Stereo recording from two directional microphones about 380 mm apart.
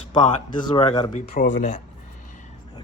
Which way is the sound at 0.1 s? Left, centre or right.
Centre.